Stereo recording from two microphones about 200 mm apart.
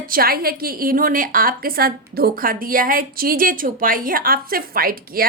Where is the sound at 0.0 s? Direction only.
45° right (ahead or behind).